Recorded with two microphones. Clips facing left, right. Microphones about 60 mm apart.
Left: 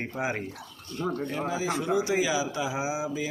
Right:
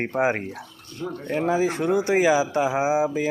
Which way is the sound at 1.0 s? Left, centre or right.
Left.